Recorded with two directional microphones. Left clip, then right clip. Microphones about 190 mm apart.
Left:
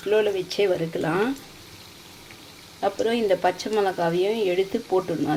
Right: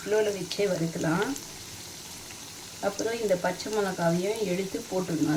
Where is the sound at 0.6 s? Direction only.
35° left (ahead or behind).